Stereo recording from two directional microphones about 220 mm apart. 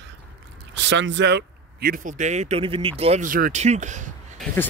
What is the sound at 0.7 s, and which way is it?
Speech, 55° right (ahead or behind).